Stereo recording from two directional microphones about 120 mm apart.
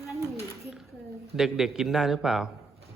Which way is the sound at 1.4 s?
5° right (ahead or behind).